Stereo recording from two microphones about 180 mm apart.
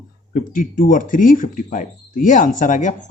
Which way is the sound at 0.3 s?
50° left (ahead or behind).